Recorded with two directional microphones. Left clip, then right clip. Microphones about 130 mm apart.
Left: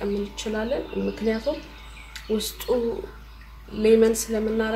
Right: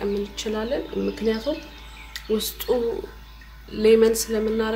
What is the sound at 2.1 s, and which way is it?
Speech, 20° right (ahead or behind).